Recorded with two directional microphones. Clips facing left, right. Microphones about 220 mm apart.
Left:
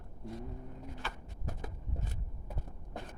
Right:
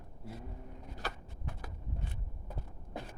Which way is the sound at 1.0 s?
40° right (ahead or behind).